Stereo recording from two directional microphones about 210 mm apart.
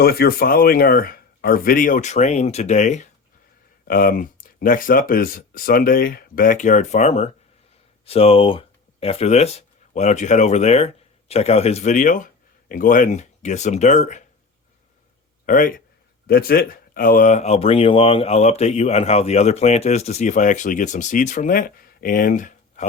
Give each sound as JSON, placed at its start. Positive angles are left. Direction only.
{"t": 0.0, "sound": "speech", "side_deg": 45}
{"t": 15.4, "sound": "speech", "side_deg": 40}